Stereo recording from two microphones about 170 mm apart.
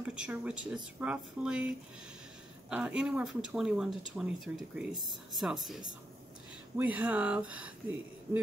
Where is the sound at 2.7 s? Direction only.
5° right (ahead or behind).